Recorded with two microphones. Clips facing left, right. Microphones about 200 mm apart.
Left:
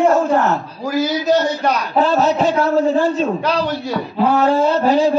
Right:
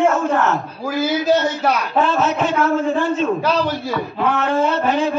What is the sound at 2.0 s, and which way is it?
A man's voice, 35° left (ahead or behind).